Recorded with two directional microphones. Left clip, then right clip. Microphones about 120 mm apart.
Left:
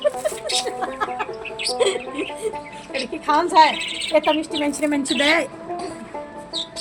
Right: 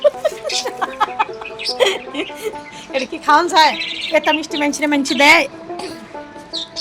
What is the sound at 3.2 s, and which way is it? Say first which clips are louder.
A woman's voice: right 3 dB; 90° right.